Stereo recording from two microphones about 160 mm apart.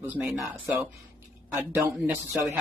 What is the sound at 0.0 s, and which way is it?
Speech, 10° right (ahead or behind).